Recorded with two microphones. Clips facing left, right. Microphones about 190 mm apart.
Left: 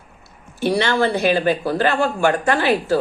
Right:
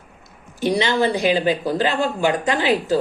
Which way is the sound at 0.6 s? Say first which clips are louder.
Left 1 dB; 15° right (ahead or behind).